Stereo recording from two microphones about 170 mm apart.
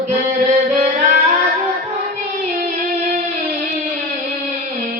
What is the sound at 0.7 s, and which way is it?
Music, 45° right (ahead or behind).